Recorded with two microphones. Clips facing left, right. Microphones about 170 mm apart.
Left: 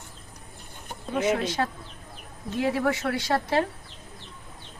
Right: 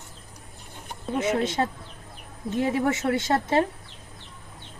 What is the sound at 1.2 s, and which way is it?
Speech, 25° right (ahead or behind).